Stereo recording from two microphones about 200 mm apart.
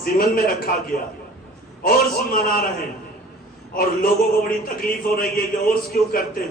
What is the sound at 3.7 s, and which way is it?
A man's voice, 45° left (ahead or behind).